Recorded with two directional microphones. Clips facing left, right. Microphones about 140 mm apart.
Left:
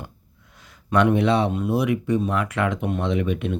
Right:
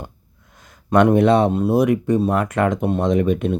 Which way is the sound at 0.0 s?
45° right (ahead or behind).